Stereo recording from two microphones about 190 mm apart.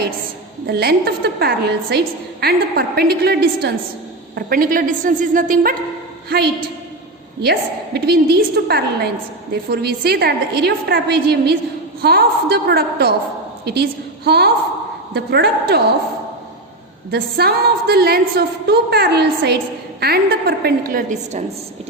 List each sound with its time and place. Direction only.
0.7 s a woman's voice: 55° right (ahead or behind)
6.2 s a woman's voice: 55° right (ahead or behind)
17.1 s a woman's voice: 55° right (ahead or behind)